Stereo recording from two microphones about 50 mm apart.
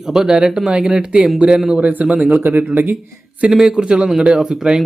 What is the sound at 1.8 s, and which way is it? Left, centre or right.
Speech, right.